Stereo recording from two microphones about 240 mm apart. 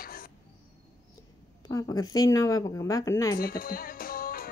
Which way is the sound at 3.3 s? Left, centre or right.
Left.